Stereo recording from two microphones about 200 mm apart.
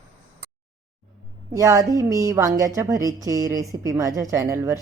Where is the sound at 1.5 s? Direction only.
15° right (ahead or behind).